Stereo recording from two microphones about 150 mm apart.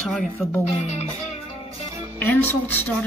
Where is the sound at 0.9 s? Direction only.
45° left (ahead or behind).